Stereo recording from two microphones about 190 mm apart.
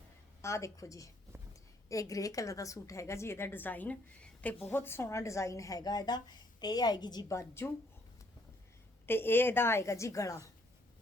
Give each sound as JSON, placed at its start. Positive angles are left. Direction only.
{"t": 0.4, "sound": "a woman's voice", "side_deg": 15}
{"t": 9.0, "sound": "a woman's voice", "side_deg": 10}